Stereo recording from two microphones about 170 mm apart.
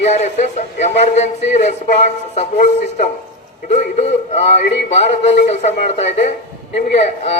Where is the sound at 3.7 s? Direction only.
40° left (ahead or behind).